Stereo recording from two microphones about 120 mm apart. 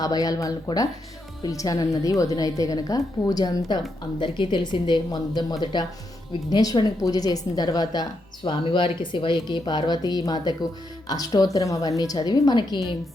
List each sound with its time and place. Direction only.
0.0 s speech: 30° left (ahead or behind)